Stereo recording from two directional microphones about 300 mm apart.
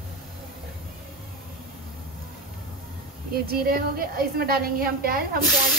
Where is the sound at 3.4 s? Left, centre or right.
Right.